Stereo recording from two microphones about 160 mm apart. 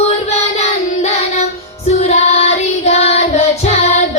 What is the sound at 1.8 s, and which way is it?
Child singing, 45° left (ahead or behind).